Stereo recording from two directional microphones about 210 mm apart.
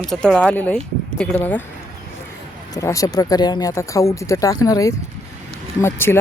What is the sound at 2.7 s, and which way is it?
Speech, 15° left (ahead or behind).